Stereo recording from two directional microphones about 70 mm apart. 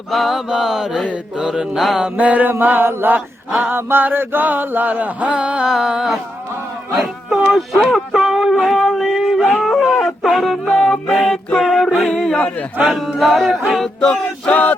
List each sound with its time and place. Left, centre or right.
0.1 s mantra: centre
2.1 s mantra: right
7.4 s a sound: centre
7.9 s yodeling: centre
9.9 s a sound: centre
10.7 s music: centre
11.1 s a sound: centre
13.1 s mantra: centre
13.7 s music: centre
14.5 s choir: left